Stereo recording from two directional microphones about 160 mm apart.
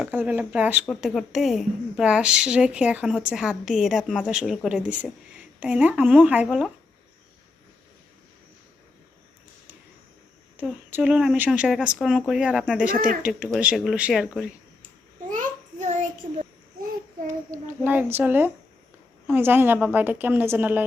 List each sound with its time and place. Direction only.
0.0 s a woman's voice: 10° right (ahead or behind)
10.6 s a woman's voice: 10° right (ahead or behind)
15.3 s a sound: 50° right (ahead or behind)
17.2 s a woman's voice: 15° right (ahead or behind)